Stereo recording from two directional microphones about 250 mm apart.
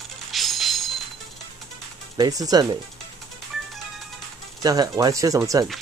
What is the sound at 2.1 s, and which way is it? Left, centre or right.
Speech, centre.